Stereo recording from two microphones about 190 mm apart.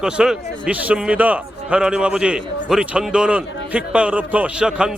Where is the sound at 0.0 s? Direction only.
5° right (ahead or behind).